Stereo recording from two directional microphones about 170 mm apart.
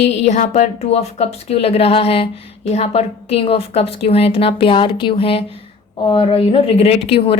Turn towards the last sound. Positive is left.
turn(degrees=35)  # may be behind; listen again after turning